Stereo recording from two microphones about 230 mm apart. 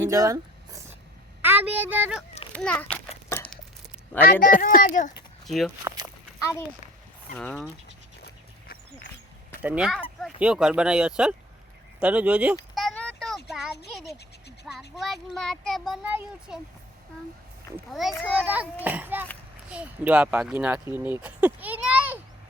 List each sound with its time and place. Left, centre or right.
0.0 s a sound: centre
1.4 s a child's voice: centre
2.5 s a child's voice: centre
2.9 s a sound: centre
4.6 s a child's voice: left
5.5 s speech: centre
7.3 s speech: centre
8.2 s a sound: left
9.6 s speech: centre
12.7 s a sound: centre
14.8 s speech: centre
17.7 s a child's voice: centre